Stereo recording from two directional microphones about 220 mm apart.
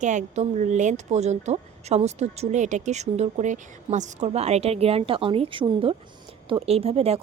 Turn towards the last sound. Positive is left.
turn(degrees=-25)  # may be behind; listen again after turning